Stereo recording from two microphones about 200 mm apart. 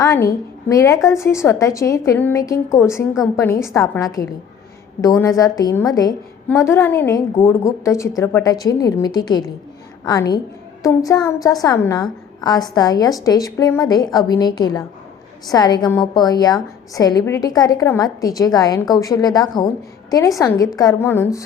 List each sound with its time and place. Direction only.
0.7 s a woman's voice: 15° left (ahead or behind)